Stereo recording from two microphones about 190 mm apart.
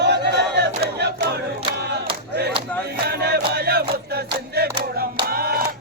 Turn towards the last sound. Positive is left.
turn(degrees=-50)  # may be behind; listen again after turning